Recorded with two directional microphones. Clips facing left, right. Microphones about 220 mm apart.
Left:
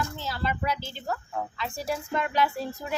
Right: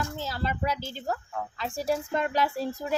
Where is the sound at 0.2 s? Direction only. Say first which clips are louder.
Even; 40° right (ahead or behind).